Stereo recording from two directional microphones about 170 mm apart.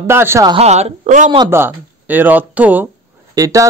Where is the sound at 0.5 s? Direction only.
40° right (ahead or behind).